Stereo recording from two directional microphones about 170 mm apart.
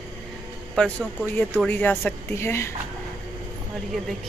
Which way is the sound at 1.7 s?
10° left (ahead or behind).